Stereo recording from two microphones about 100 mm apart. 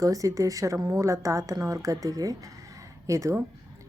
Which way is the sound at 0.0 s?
35° right (ahead or behind).